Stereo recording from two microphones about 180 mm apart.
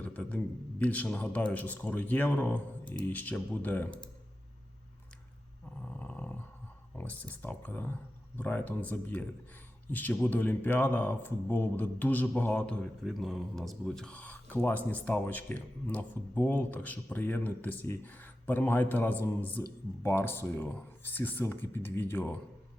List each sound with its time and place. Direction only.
0.0 s speech: 10° left (ahead or behind)
5.9 s dog: 10° left (ahead or behind)
6.9 s speech: 10° left (ahead or behind)